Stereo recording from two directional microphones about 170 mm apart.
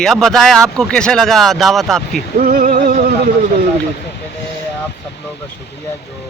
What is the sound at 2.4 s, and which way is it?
Music, 55° right (ahead or behind).